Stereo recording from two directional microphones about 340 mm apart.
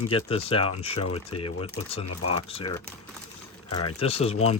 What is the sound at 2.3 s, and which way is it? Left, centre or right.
Speech, centre.